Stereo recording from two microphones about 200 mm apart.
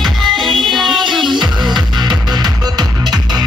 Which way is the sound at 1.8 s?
20° right (ahead or behind).